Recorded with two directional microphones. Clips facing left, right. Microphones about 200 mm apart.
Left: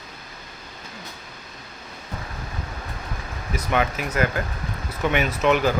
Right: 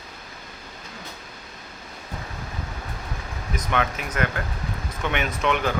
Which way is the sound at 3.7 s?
10° left (ahead or behind).